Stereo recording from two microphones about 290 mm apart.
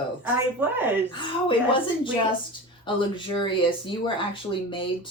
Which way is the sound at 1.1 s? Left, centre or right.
Centre.